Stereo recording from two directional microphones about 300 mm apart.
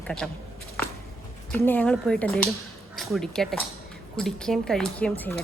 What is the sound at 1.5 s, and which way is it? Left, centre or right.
A woman's voice, centre.